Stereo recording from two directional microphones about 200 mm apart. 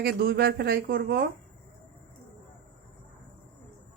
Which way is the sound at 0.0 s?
50° right (ahead or behind).